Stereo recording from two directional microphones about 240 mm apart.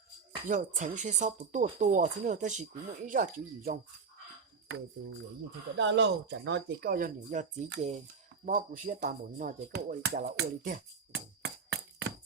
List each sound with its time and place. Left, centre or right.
0.4 s speech: right
5.7 s speech: right